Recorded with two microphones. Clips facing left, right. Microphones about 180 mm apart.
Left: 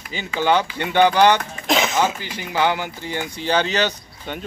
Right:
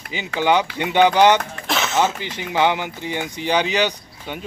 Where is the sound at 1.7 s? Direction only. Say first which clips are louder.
Left 1 dB; 15° left (ahead or behind).